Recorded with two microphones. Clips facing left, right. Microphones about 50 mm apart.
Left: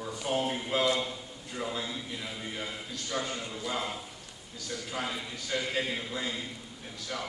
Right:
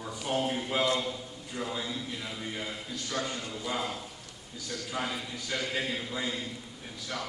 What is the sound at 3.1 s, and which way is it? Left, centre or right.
Speech, centre.